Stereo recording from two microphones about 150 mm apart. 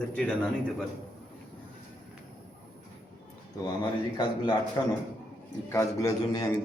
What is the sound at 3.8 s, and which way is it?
A man's voice, 30° left (ahead or behind).